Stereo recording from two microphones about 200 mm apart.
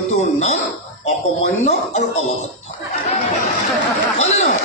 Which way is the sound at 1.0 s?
35° left (ahead or behind).